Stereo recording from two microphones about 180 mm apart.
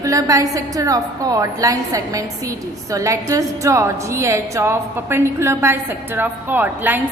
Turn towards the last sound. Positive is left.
turn(degrees=-10)  # may be behind; listen again after turning